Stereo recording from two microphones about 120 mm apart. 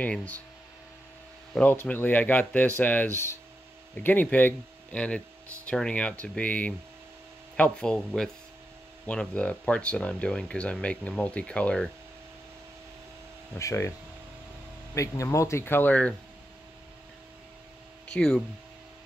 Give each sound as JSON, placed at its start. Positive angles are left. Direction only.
{"t": 0.0, "sound": "speech", "side_deg": 10}
{"t": 1.5, "sound": "speech", "side_deg": 15}
{"t": 13.6, "sound": "speech", "side_deg": 25}
{"t": 15.0, "sound": "speech", "side_deg": 25}
{"t": 18.1, "sound": "speech", "side_deg": 5}